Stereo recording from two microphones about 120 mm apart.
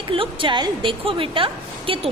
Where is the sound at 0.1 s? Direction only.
45° right (ahead or behind).